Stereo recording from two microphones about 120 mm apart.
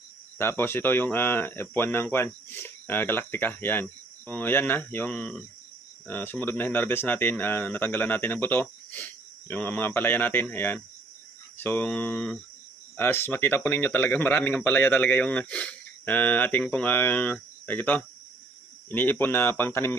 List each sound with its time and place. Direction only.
0.3 s speech: 20° left (ahead or behind)